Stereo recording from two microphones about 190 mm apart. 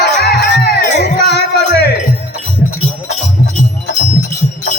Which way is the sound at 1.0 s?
60° left (ahead or behind).